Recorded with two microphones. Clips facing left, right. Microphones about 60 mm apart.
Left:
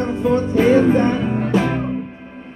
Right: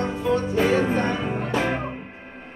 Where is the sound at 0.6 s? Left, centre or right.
Left.